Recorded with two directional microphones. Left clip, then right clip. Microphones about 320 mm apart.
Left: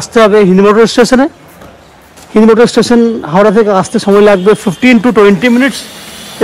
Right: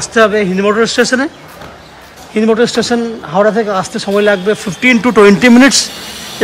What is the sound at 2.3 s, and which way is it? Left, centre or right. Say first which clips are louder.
Speech: left 5 dB; centre.